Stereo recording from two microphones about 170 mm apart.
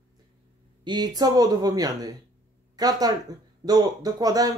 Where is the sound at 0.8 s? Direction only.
25° right (ahead or behind).